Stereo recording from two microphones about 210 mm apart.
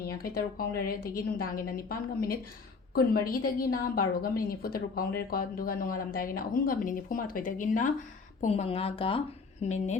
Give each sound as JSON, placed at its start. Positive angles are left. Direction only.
{"t": 0.0, "sound": "a woman's voice", "side_deg": 45}